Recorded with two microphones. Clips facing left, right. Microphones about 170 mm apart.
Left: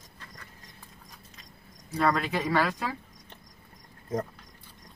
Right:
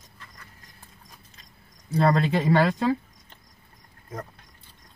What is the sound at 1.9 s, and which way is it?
Speech, 30° right (ahead or behind).